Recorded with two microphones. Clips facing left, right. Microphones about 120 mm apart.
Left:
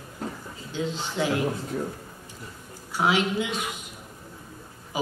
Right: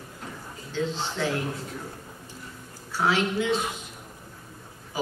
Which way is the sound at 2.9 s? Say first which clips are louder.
Left 1 dB; 15° left (ahead or behind).